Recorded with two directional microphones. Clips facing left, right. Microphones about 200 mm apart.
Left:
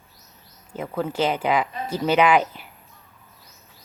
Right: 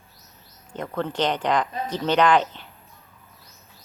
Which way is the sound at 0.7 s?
5° left (ahead or behind).